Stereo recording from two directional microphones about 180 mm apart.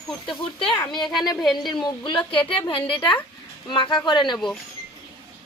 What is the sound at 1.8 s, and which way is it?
A woman's voice, 25° left (ahead or behind).